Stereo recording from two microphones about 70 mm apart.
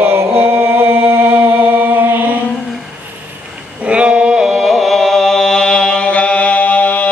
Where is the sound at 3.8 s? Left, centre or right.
Centre.